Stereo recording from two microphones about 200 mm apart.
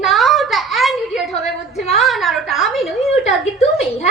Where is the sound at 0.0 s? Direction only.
Centre (ahead or behind).